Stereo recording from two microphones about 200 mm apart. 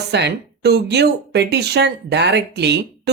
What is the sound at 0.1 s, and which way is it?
Speech, 55° right (ahead or behind).